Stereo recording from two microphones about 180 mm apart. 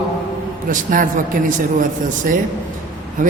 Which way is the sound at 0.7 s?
45° right (ahead or behind).